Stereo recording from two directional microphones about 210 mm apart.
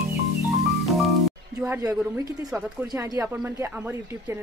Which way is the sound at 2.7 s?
15° right (ahead or behind).